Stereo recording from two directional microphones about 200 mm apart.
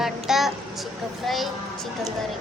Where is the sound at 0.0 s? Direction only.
Centre (ahead or behind).